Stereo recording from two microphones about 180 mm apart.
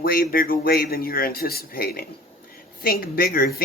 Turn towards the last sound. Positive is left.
turn(degrees=50)  # may be behind; listen again after turning